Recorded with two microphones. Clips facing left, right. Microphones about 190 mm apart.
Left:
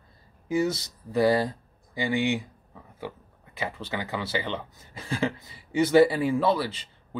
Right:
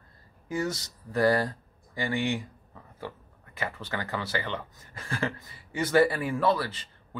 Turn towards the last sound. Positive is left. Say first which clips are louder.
# left 3 dB
turn(degrees=15)  # may be behind; listen again after turning